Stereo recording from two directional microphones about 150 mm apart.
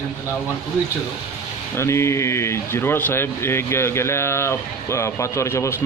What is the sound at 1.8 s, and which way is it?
A man's voice, 20° left (ahead or behind).